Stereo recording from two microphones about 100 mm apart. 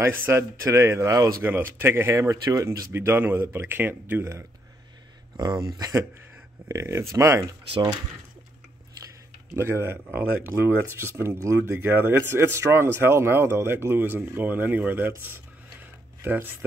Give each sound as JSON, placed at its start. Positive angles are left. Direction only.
{"t": 0.0, "sound": "speech", "side_deg": -25}
{"t": 1.5, "sound": "speech", "side_deg": -20}
{"t": 5.4, "sound": "speech", "side_deg": -40}
{"t": 9.6, "sound": "speech", "side_deg": -25}
{"t": 15.8, "sound": "a sound", "side_deg": -20}